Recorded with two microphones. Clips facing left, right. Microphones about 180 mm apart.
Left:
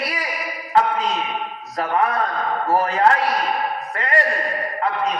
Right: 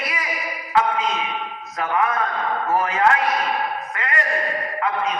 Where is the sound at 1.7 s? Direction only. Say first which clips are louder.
Left 1 dB; 35° left (ahead or behind).